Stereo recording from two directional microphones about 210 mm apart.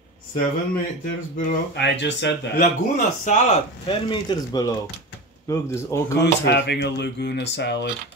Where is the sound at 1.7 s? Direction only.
55° left (ahead or behind).